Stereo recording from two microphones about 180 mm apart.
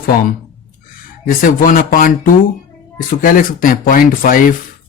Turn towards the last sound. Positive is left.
turn(degrees=50)  # may be behind; listen again after turning